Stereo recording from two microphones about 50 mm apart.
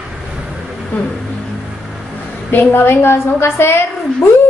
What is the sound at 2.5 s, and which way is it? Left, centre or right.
A woman's voice, left.